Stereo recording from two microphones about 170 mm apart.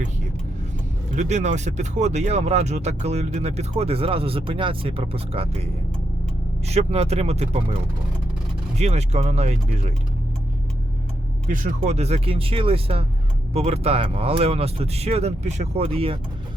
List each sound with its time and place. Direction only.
1.1 s speech: 45° right (ahead or behind)
6.7 s speech: 40° right (ahead or behind)
8.8 s speech: 40° right (ahead or behind)
11.4 s speech: 50° right (ahead or behind); by 16.1 s 35° right (ahead or behind)